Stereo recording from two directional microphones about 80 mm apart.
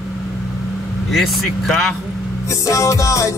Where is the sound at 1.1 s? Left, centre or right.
Centre.